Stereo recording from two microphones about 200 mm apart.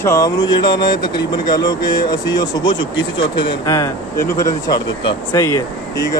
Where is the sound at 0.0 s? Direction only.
15° left (ahead or behind).